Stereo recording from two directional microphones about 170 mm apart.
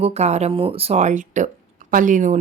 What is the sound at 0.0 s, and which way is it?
A woman's voice, 40° right (ahead or behind).